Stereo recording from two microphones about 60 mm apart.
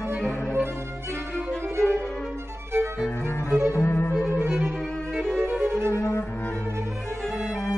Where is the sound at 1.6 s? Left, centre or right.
Right.